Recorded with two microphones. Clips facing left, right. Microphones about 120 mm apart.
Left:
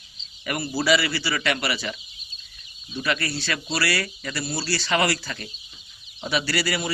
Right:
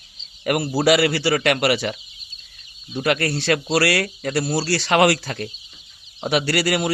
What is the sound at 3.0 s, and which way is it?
Speech, 50° right (ahead or behind).